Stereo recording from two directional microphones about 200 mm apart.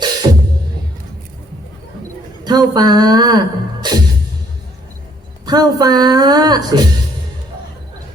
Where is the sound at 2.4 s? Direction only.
20° right (ahead or behind).